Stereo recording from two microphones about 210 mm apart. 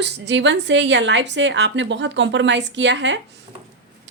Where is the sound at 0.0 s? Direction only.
55° right (ahead or behind).